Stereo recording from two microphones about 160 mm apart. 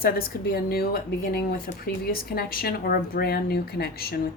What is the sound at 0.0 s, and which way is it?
Speech, 70° left (ahead or behind).